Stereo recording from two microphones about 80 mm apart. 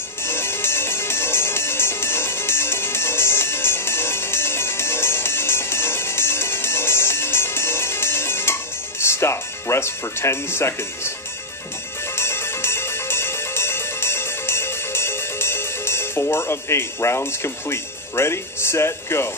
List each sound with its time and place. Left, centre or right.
0.2 s music: left
9.0 s speech: left
12.2 s music: left